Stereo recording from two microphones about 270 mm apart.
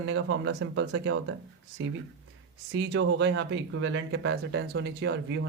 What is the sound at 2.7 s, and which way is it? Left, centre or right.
Speech, right.